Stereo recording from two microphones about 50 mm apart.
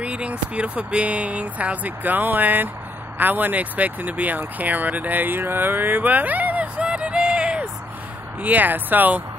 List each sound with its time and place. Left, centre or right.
0.0 s speech: right
8.4 s speech: right